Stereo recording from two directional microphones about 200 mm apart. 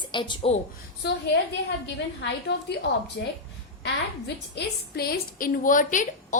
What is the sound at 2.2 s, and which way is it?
A woman's voice, 60° left (ahead or behind).